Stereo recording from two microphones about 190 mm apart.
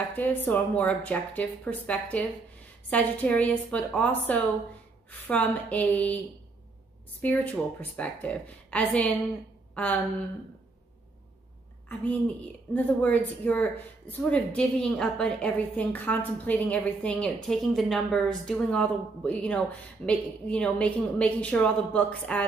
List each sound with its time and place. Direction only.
0.1 s a woman's voice: 10° left (ahead or behind)
7.2 s a woman's voice: 10° left (ahead or behind)
11.9 s a woman's voice: 10° left (ahead or behind)